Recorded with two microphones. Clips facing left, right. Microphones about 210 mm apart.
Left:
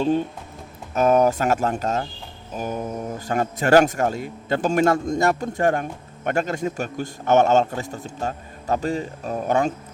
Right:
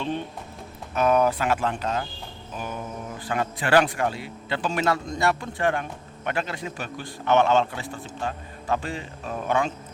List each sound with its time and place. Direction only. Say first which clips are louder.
0.0 s a man's voice: left 8 dB; 40° left (ahead or behind)